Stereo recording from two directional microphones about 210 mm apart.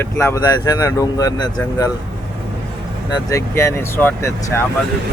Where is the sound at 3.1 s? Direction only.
15° left (ahead or behind).